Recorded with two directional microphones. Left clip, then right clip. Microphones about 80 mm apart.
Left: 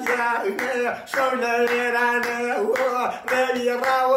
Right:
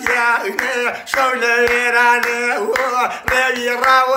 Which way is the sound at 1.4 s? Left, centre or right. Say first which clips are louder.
Right 6 dB; left.